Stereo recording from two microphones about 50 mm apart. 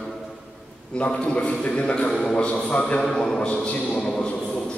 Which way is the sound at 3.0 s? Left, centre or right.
Centre.